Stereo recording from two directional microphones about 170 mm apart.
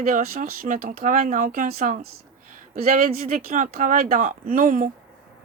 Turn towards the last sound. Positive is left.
turn(degrees=-50)  # may be behind; listen again after turning